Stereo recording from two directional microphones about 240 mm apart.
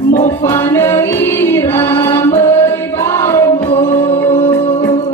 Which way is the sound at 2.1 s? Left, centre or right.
Centre.